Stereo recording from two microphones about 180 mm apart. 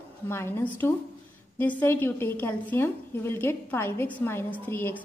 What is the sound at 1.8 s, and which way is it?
A woman's voice, 10° left (ahead or behind).